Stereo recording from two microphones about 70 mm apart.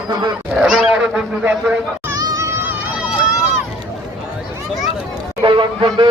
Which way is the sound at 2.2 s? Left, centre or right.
Right.